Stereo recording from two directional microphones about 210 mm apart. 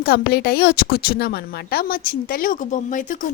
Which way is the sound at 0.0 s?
45° left (ahead or behind).